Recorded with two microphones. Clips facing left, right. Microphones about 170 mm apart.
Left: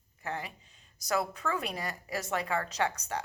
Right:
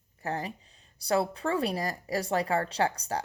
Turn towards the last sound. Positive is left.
turn(degrees=-35)  # may be behind; listen again after turning